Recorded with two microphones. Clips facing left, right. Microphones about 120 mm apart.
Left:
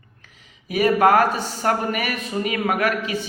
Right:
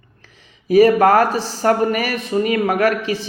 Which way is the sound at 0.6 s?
40° right (ahead or behind).